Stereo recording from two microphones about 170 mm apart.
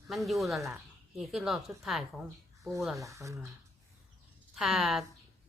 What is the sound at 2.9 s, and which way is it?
Speech, 20° right (ahead or behind).